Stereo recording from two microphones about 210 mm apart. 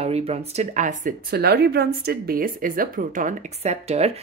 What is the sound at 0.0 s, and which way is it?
A woman's voice, 30° right (ahead or behind).